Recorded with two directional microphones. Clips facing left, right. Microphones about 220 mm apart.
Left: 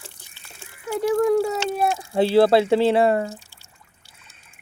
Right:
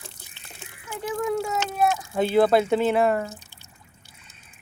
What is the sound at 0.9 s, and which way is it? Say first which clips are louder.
Speech: left 8 dB; 40° left (ahead or behind).